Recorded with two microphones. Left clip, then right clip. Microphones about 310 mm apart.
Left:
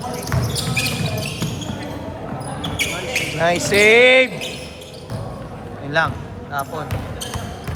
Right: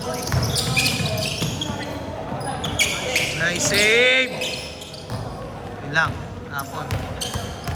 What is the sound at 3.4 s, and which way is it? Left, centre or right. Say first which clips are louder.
Speech: left 7 dB; centre.